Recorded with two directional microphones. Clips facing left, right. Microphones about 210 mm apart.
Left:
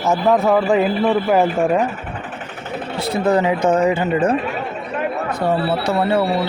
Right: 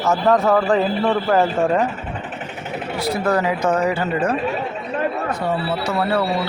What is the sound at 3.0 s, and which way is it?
Speech, 20° left (ahead or behind).